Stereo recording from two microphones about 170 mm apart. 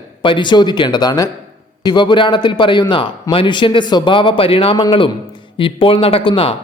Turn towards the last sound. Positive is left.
turn(degrees=30)  # may be behind; listen again after turning